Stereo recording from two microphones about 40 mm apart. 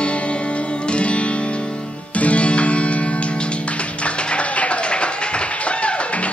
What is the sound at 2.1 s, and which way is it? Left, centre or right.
Music, left.